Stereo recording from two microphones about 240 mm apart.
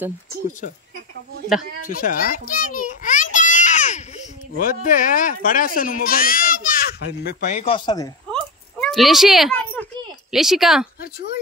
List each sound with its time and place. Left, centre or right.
1.8 s children playing: left
7.5 s speech: left
8.3 s a sound: centre
10.3 s a woman's voice: centre